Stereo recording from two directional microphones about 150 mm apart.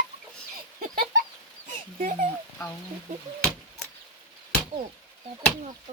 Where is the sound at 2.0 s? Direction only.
60° right (ahead or behind).